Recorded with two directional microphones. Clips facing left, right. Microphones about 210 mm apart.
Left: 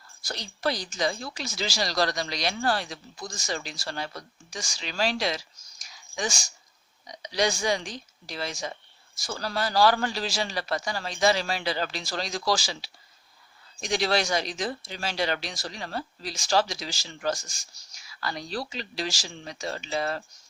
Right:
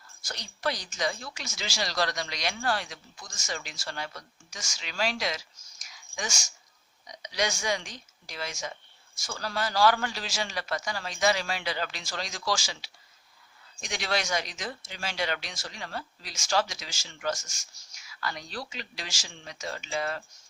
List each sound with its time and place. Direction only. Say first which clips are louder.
0.2 s speech: left 3 dB; 35° left (ahead or behind)